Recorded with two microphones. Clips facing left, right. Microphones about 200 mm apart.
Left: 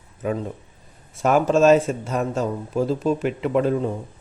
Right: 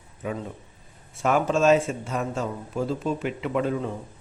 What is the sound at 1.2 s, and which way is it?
A man's voice, 40° left (ahead or behind).